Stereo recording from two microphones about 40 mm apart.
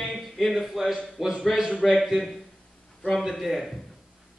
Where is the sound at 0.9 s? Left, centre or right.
Centre.